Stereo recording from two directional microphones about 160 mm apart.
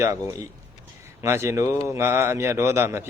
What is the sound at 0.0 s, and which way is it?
Speech, 20° right (ahead or behind).